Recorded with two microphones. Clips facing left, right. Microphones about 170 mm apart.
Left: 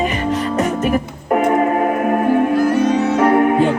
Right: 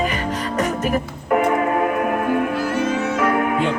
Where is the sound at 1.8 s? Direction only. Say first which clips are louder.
Left 4 dB; 40° left (ahead or behind).